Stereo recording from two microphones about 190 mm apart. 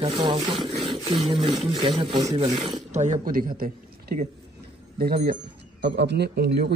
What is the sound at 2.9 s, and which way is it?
A man's voice, 40° right (ahead or behind).